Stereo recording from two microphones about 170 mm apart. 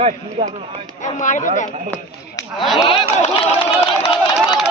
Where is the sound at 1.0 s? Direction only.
50° left (ahead or behind).